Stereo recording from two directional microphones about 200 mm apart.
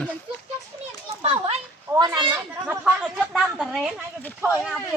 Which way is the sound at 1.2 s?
30° right (ahead or behind).